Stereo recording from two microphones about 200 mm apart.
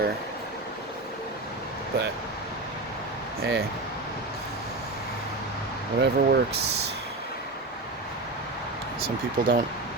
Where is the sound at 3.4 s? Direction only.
50° right (ahead or behind).